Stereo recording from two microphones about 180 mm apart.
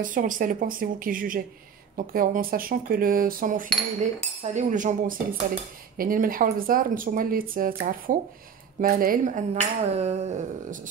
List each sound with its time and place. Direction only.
0.0 s speech: 50° right (ahead or behind)